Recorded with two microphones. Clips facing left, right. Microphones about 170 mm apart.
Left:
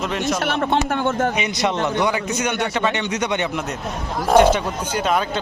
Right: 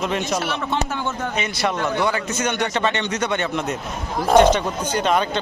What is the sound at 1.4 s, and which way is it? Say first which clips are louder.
A man's voice: left 2 dB; 20° left (ahead or behind).